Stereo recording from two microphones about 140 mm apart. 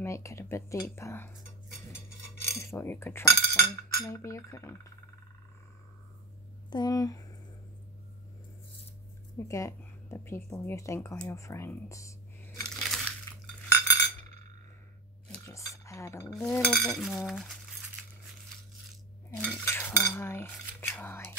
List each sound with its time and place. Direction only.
0.0 s speech: 20° left (ahead or behind)
2.5 s speech: 20° left (ahead or behind)
6.7 s speech: 30° left (ahead or behind)
9.4 s speech: 20° left (ahead or behind)
12.6 s crunch: centre (ahead or behind)
13.3 s cutlery: 20° left (ahead or behind)
15.4 s cutlery: 20° left (ahead or behind)
16.3 s stir: 5° left (ahead or behind)
19.3 s cutlery: 15° left (ahead or behind)